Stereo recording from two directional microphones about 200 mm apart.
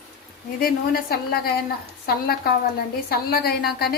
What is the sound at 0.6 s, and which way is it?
Speech, 50° left (ahead or behind).